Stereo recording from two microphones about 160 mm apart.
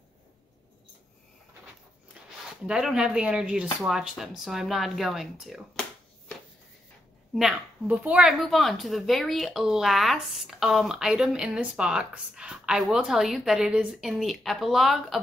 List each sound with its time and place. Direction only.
2.6 s speech: 5° right (ahead or behind)
7.3 s speech: 5° right (ahead or behind)